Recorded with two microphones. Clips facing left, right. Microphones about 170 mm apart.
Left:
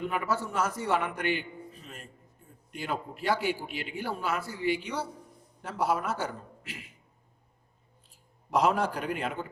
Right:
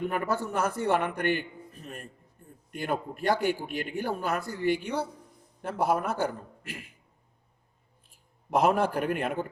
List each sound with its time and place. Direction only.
0.1 s a man's voice: 50° right (ahead or behind)
8.1 s a man's voice: 55° right (ahead or behind)